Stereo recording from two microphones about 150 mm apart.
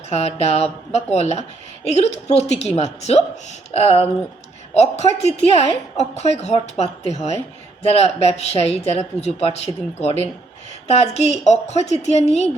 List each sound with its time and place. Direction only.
0.1 s speech: 45° left (ahead or behind)